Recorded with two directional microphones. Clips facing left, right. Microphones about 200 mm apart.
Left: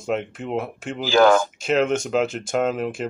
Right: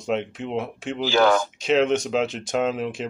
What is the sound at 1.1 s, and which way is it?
Speech, 50° left (ahead or behind).